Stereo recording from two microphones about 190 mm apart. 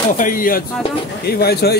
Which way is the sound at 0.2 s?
45° left (ahead or behind).